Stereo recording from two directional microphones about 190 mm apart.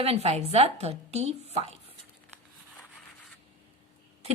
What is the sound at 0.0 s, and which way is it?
A woman's voice, 30° right (ahead or behind).